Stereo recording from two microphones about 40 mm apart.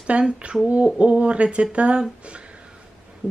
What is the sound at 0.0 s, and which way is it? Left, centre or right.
Speech, right.